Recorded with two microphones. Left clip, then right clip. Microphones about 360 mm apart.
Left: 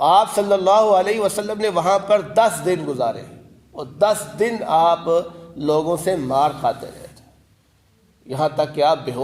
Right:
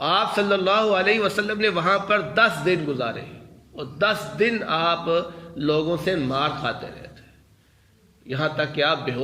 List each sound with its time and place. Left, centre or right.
0.0 s a man's voice: centre
8.3 s a man's voice: centre